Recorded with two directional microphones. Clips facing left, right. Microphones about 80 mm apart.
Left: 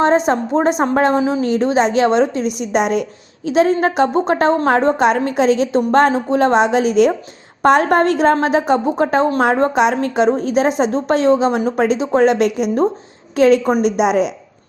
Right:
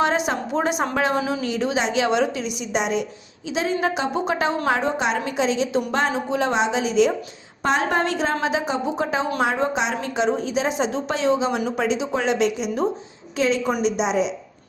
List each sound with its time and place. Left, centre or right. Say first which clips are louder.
0.3 s a woman's voice: left 7 dB; left
2.6 s a woman's voice: left 6 dB; left